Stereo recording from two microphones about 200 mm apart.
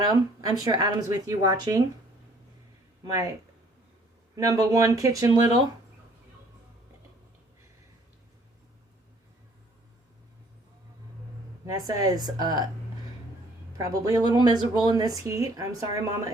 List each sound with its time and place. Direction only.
0.1 s speech: 20° right (ahead or behind)
3.0 s speech: 15° right (ahead or behind)
4.4 s speech: 15° right (ahead or behind)
11.6 s speech: 20° right (ahead or behind)
13.7 s speech: 15° right (ahead or behind)